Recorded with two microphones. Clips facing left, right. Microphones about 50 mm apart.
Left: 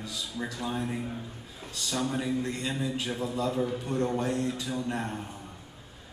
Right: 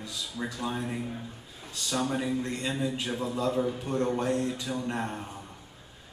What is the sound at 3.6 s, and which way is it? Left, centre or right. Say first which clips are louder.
A man's voice: right 1 dB; right.